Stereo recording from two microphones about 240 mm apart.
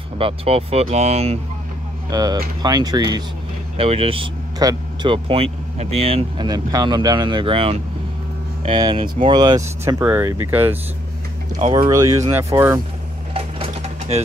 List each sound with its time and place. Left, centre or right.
0.2 s speech: right
2.0 s speech: centre
13.3 s mechanisms: right